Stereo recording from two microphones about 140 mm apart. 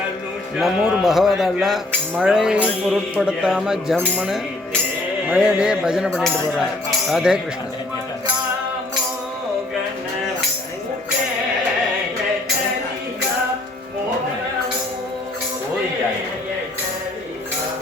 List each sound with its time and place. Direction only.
0.5 s speech: 5° right (ahead or behind)